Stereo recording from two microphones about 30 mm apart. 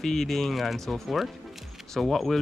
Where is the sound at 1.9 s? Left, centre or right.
Centre.